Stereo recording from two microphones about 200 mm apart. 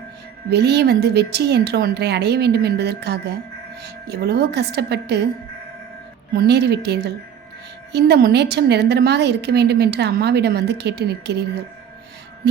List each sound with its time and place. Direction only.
0.5 s a woman's voice: 55° right (ahead or behind)
6.3 s a woman's voice: 55° right (ahead or behind)